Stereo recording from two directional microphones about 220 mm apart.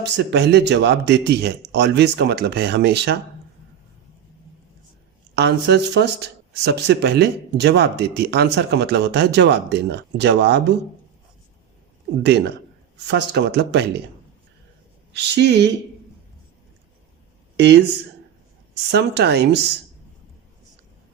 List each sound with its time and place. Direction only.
0.0 s speech: 50° right (ahead or behind)
5.3 s speech: 50° right (ahead or behind)
12.2 s speech: 50° right (ahead or behind)
15.1 s speech: 50° right (ahead or behind)
18.7 s speech: 50° right (ahead or behind)